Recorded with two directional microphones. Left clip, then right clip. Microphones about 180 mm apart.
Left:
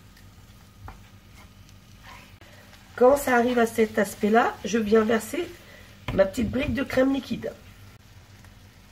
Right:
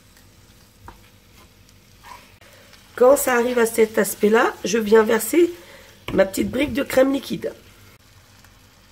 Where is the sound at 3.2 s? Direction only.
60° right (ahead or behind).